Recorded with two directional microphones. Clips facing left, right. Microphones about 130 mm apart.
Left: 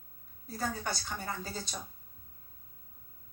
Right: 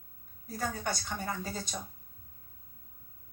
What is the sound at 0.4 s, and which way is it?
A woman's voice, 30° left (ahead or behind).